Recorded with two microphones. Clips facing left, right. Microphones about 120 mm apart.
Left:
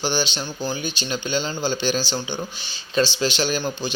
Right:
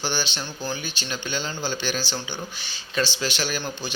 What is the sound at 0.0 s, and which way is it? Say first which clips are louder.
A man's voice: left 4 dB; 20° left (ahead or behind).